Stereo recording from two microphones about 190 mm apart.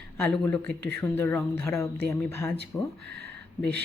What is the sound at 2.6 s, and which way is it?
Speech, 60° right (ahead or behind).